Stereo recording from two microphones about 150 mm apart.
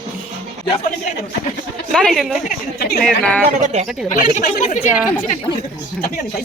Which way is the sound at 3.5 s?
55° right (ahead or behind).